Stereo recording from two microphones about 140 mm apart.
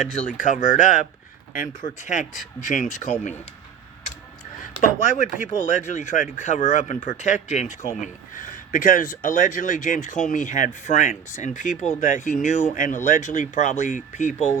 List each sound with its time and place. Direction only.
0.0 s speech: 55° left (ahead or behind)
4.8 s speech: 65° left (ahead or behind)